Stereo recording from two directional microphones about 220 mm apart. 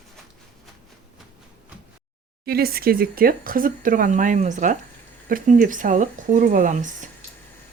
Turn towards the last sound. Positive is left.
turn(degrees=-35)  # may be behind; listen again after turning